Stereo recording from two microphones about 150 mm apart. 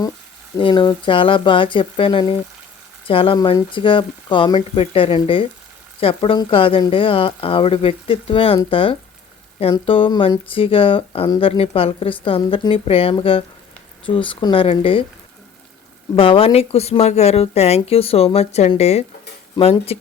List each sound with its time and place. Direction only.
0.6 s speech: 35° left (ahead or behind)
16.1 s speech: 35° left (ahead or behind)